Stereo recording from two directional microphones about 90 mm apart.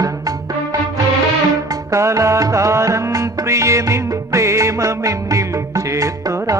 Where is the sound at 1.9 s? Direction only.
35° right (ahead or behind).